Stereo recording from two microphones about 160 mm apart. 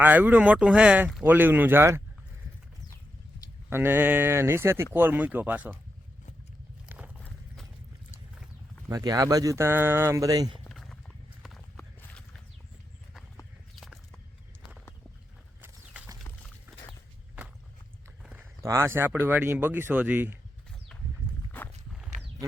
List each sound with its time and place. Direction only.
0.0 s speech: 10° right (ahead or behind)
3.7 s speech: 15° right (ahead or behind)
6.8 s walk: 10° right (ahead or behind)
7.3 s clip-clop: centre (ahead or behind)
8.9 s speech: 20° right (ahead or behind)
10.7 s a sound: centre (ahead or behind)
13.7 s horse: centre (ahead or behind)
15.6 s a sound: 10° right (ahead or behind)
18.2 s speech: 10° right (ahead or behind)
20.9 s a sound: 5° left (ahead or behind)